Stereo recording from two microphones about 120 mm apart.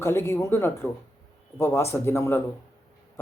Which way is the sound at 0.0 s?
20° left (ahead or behind).